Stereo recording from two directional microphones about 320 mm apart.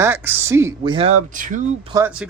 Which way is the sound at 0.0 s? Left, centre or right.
Centre.